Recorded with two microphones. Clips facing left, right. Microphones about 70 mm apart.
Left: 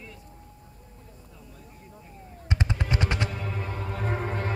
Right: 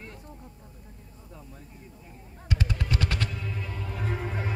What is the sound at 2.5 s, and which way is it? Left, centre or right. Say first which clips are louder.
Machine gun: left 1 dB; left.